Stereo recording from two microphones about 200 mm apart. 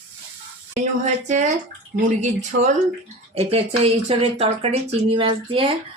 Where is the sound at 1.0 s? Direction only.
40° right (ahead or behind).